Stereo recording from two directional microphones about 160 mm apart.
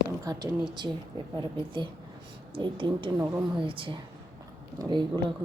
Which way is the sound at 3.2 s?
15° right (ahead or behind).